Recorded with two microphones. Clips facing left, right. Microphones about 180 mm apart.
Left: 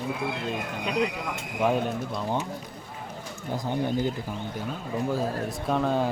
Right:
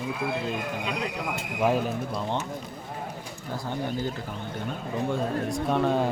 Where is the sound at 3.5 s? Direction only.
15° left (ahead or behind).